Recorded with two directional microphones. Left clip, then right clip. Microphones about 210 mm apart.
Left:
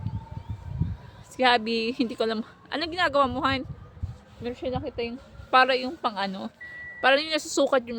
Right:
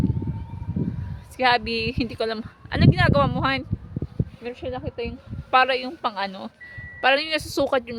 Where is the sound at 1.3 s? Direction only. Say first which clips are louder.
Right 2 dB; 5° right (ahead or behind).